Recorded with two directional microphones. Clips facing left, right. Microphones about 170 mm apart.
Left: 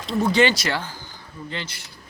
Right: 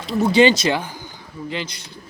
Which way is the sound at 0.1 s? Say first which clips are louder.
Right 4 dB; 10° right (ahead or behind).